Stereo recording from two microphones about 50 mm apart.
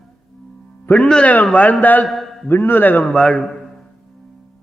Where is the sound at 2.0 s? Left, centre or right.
Centre.